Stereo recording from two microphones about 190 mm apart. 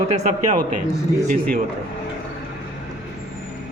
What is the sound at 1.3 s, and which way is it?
Speech, 50° right (ahead or behind).